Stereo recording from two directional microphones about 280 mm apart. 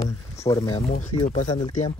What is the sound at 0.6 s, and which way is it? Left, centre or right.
Speech, left.